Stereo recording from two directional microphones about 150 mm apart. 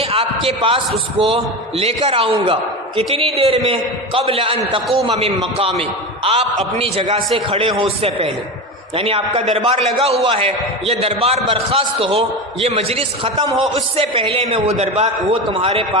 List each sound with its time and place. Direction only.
0.0 s a man's voice: 40° right (ahead or behind)
15.4 s a man's voice: 30° right (ahead or behind)